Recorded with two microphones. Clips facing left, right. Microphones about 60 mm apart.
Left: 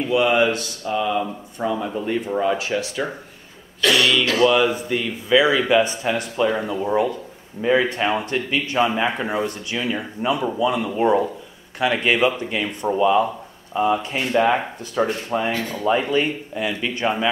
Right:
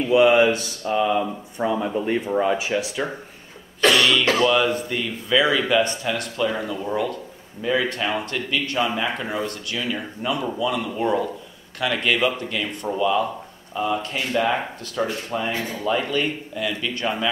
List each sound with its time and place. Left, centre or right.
0.1 s speech: centre
0.8 s speech: centre